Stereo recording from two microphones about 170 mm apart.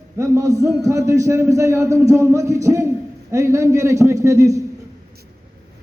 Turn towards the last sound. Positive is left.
turn(degrees=-20)  # may be behind; listen again after turning